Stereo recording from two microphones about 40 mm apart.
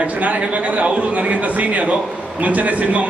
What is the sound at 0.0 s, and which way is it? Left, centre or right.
A man's voice, right.